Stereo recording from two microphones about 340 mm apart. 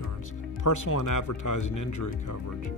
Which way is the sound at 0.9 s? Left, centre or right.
Left.